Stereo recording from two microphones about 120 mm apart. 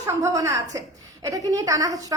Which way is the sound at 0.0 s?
30° right (ahead or behind).